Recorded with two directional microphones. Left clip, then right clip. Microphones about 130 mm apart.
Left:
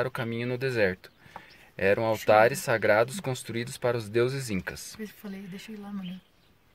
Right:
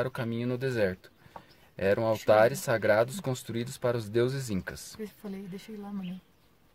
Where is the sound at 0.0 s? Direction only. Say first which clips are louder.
Left 2 dB; centre (ahead or behind).